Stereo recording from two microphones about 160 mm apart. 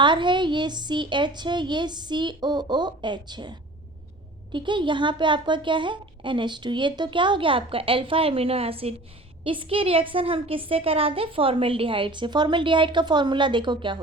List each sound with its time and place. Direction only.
0.0 s a woman's voice: 30° right (ahead or behind)
4.5 s a woman's voice: 30° right (ahead or behind)